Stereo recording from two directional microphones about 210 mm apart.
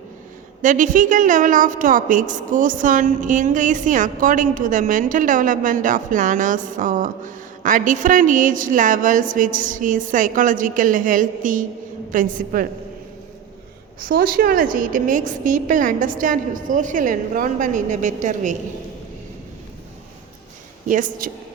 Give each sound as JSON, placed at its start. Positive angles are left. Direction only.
{"t": 0.6, "sound": "a woman's voice", "side_deg": -40}
{"t": 14.0, "sound": "a woman's voice", "side_deg": -45}
{"t": 20.8, "sound": "a woman's voice", "side_deg": -40}